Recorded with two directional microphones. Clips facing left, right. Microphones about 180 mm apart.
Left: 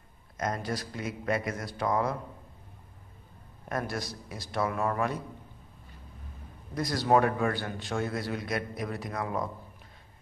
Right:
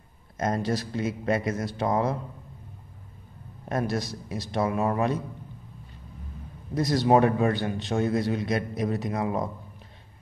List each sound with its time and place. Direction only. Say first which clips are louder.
0.4 s a man's voice: right 5 dB; 25° right (ahead or behind)
3.6 s a man's voice: right 5 dB; 25° right (ahead or behind)
6.7 s a man's voice: right 4 dB; 25° right (ahead or behind)